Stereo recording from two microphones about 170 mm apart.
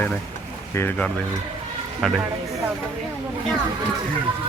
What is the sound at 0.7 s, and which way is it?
A man's voice, 10° left (ahead or behind).